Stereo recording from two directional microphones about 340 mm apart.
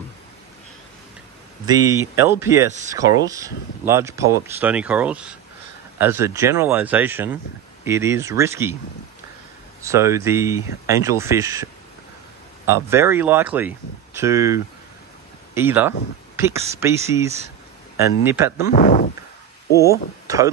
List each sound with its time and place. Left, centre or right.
1.7 s speech: centre
9.8 s speech: centre
12.6 s speech: centre
18.7 s speech: left
19.8 s speech: centre